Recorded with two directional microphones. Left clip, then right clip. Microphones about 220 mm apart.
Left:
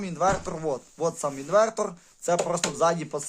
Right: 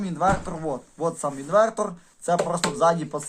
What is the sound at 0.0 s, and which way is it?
Speech, 45° left (ahead or behind).